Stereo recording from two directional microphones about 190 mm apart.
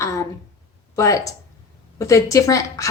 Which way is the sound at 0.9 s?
15° left (ahead or behind).